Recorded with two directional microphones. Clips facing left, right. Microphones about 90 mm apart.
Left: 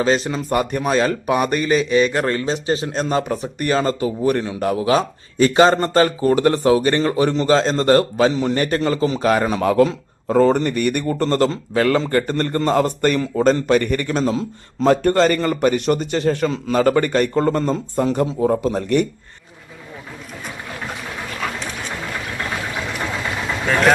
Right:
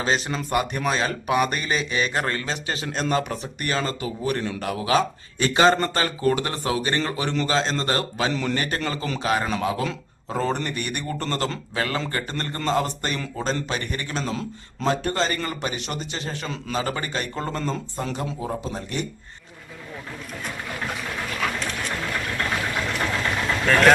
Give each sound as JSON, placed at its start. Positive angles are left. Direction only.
{"t": 0.0, "sound": "a man's voice", "side_deg": 40}
{"t": 20.7, "sound": "vehicle", "side_deg": 5}